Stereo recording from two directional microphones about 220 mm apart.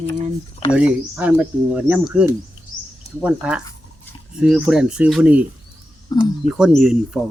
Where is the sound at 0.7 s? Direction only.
5° right (ahead or behind).